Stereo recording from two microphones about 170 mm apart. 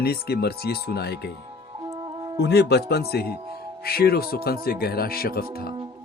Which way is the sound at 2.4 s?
70° left (ahead or behind).